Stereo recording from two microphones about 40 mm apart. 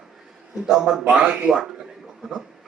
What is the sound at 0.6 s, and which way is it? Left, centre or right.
Speech, centre.